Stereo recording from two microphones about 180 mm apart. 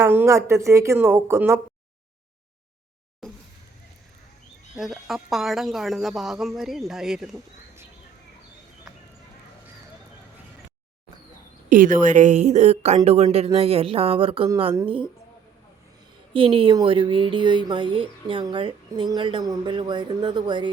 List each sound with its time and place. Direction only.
0.0 s speech: 15° right (ahead or behind)
4.8 s speech: centre (ahead or behind)
11.7 s a woman's voice: 45° right (ahead or behind); by 14.5 s 30° right (ahead or behind)
16.3 s speech: 30° right (ahead or behind)